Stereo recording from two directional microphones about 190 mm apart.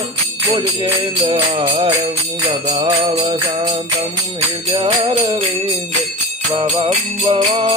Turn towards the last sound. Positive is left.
turn(degrees=-30)  # may be behind; listen again after turning